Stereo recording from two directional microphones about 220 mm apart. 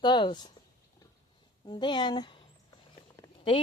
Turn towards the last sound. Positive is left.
turn(degrees=15)  # may be behind; listen again after turning